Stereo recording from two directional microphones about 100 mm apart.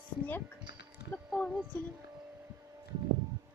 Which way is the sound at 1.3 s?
5° left (ahead or behind).